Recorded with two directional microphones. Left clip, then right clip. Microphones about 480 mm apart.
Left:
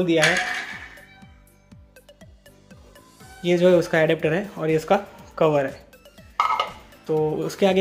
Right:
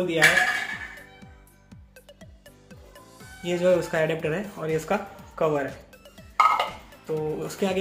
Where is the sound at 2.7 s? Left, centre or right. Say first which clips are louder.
Right 2 dB; centre.